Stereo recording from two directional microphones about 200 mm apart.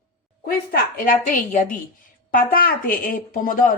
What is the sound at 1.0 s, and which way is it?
A woman's voice, 40° left (ahead or behind).